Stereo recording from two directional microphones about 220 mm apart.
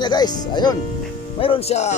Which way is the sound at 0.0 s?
20° left (ahead or behind).